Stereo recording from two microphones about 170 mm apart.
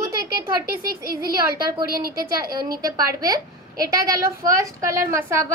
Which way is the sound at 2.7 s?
20° right (ahead or behind).